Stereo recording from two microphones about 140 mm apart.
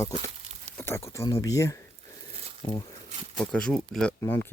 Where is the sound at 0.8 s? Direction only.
20° left (ahead or behind).